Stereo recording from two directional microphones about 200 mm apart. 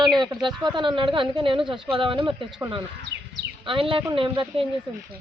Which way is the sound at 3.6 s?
25° right (ahead or behind).